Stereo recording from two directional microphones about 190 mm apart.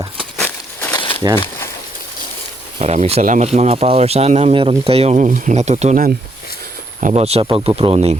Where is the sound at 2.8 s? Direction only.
35° right (ahead or behind).